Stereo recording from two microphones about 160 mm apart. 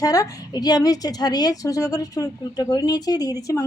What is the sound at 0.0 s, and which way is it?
Speech, 20° left (ahead or behind).